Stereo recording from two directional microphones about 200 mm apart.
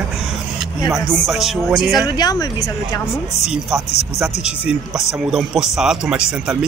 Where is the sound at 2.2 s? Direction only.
20° left (ahead or behind).